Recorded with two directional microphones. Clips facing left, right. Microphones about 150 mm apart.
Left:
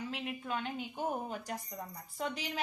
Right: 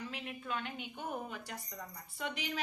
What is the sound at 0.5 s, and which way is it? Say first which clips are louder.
Speech: left 2 dB; 35° left (ahead or behind).